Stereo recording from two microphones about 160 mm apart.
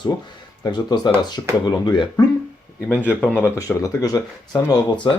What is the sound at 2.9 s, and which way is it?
Speech, 10° right (ahead or behind).